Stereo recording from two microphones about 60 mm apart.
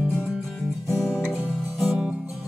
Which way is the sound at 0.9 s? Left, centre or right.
Centre.